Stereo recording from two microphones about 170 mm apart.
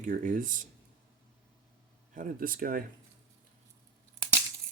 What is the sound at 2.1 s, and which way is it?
Speech, 55° right (ahead or behind).